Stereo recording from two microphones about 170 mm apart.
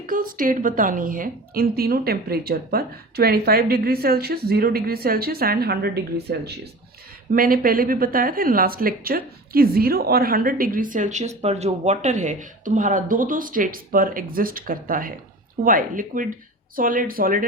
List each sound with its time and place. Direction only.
0.0 s a woman's voice: 55° right (ahead or behind); by 6.5 s 70° right (ahead or behind)
7.3 s a woman's voice: 55° right (ahead or behind)